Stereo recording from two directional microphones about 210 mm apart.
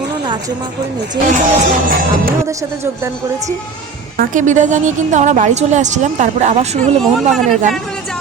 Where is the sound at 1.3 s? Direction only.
40° right (ahead or behind).